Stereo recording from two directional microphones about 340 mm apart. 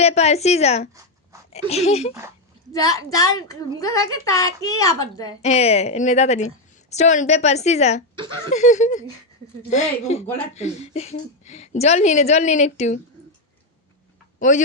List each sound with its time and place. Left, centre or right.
0.0 s a woman's voice: centre
14.3 s speech: left